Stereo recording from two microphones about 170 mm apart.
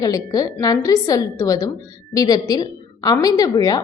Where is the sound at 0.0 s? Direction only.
20° left (ahead or behind).